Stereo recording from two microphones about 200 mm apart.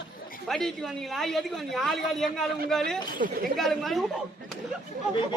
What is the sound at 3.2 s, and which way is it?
Speech, 45° right (ahead or behind).